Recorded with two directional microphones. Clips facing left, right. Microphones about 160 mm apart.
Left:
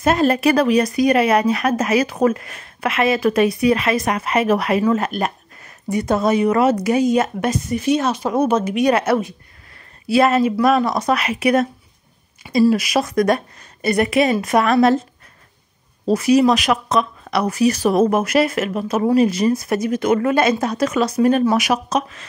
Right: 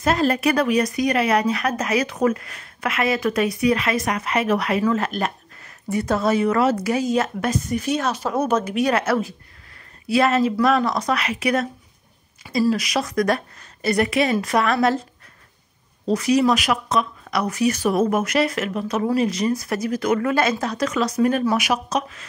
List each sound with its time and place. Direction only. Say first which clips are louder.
0.0 s speech: left 4 dB; 20° left (ahead or behind)
10.0 s speech: left 3 dB; 30° left (ahead or behind)
10.3 s speech: left 3 dB; 10° left (ahead or behind)
11.0 s speech: left 4 dB; 25° left (ahead or behind)
12.7 s speech: left 4 dB; 25° left (ahead or behind)
16.1 s speech: left 4 dB; 25° left (ahead or behind)
16.5 s speech: left 3 dB; 40° left (ahead or behind)